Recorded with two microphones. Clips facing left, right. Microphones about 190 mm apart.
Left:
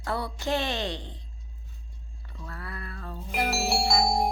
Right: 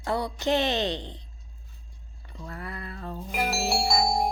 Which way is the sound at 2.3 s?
20° right (ahead or behind).